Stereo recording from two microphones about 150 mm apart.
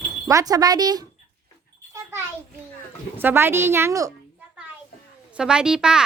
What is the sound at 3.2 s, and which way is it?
Speech, 15° right (ahead or behind).